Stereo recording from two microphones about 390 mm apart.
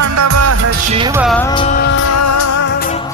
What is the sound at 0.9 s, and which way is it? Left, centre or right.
Music, centre.